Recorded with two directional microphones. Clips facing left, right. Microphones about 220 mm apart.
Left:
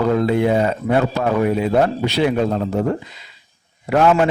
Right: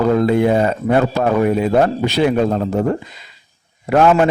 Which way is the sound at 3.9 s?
50° right (ahead or behind).